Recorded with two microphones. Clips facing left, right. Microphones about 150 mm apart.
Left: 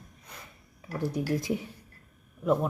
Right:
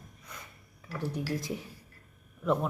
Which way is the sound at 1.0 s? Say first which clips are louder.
Left 4 dB; 10° left (ahead or behind).